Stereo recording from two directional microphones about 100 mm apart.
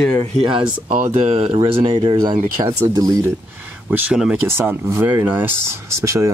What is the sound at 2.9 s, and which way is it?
Speech, 40° right (ahead or behind).